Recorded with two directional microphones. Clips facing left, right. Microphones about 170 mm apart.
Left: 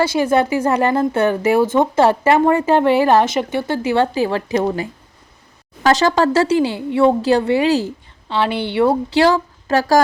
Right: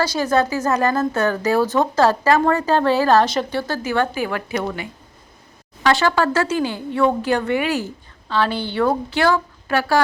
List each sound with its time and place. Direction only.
0.0 s a woman's voice: 25° left (ahead or behind)